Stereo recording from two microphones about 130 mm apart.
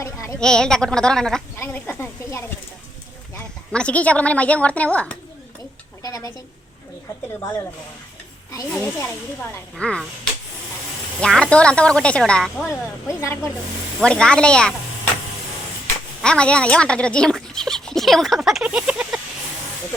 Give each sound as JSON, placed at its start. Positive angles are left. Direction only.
{"t": 0.0, "sound": "a sound", "side_deg": 20}
{"t": 0.3, "sound": "a woman's voice", "side_deg": 5}
{"t": 1.5, "sound": "speech", "side_deg": 15}
{"t": 3.7, "sound": "a woman's voice", "side_deg": 10}
{"t": 6.0, "sound": "speech", "side_deg": 25}
{"t": 8.8, "sound": "a woman's voice", "side_deg": 15}
{"t": 11.2, "sound": "a woman's voice", "side_deg": 5}
{"t": 12.6, "sound": "speech", "side_deg": 20}
{"t": 14.0, "sound": "a woman's voice", "side_deg": 5}
{"t": 16.2, "sound": "speech", "side_deg": 5}